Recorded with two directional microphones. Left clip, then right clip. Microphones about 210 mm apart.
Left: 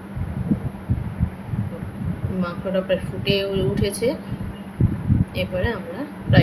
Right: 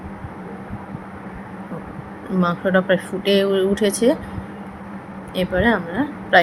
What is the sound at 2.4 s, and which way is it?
Speech, 20° right (ahead or behind).